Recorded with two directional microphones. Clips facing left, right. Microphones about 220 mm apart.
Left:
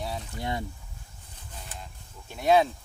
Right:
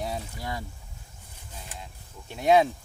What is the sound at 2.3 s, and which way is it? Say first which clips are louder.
Speech: right 1 dB; 15° right (ahead or behind).